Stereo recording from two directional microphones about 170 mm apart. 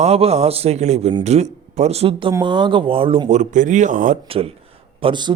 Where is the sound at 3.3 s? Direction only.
45° right (ahead or behind).